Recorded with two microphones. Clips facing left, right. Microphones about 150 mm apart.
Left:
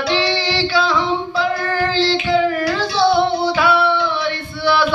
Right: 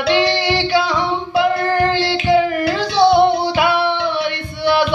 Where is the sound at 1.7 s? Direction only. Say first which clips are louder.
Right 4 dB; 20° right (ahead or behind).